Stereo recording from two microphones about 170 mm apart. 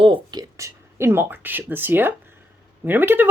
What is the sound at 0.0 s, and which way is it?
Speech, 30° right (ahead or behind).